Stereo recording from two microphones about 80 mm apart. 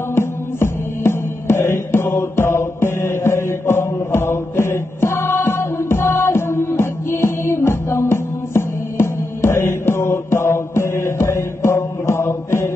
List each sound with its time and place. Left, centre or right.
0.1 s music: left